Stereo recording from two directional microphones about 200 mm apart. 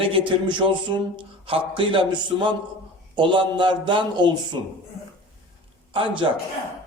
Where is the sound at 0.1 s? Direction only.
25° right (ahead or behind).